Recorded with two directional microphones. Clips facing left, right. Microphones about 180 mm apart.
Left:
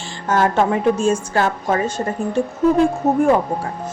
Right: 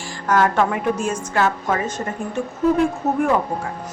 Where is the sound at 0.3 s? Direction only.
25° left (ahead or behind).